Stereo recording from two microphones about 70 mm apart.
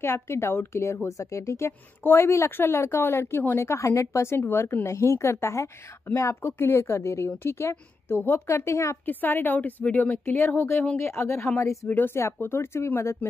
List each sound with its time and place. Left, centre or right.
0.0 s speech: left
4.4 s speech: left
9.0 s a woman's voice: left
11.0 s speech: left
11.9 s speech: left